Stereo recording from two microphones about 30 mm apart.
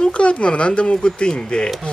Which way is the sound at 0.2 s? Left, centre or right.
Left.